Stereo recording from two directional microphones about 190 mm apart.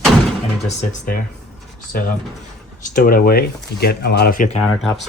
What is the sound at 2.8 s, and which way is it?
Speech, 45° left (ahead or behind).